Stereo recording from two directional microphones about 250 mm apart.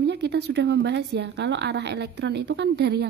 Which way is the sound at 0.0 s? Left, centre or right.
Right.